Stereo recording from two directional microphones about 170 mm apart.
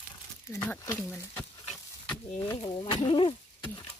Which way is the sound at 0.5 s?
10° left (ahead or behind).